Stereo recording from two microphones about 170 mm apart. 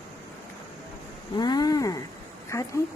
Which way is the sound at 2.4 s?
15° left (ahead or behind).